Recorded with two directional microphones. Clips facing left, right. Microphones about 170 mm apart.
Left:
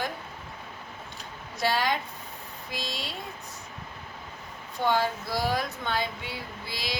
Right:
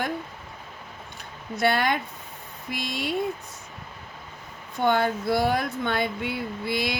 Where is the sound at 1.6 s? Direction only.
60° right (ahead or behind).